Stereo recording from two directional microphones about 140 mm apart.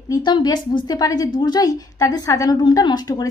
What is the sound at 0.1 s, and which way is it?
A woman's voice, 30° left (ahead or behind).